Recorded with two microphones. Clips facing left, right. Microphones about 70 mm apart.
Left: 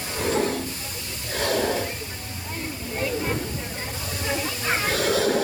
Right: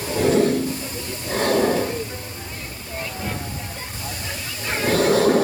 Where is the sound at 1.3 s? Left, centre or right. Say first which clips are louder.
Right 5 dB; right.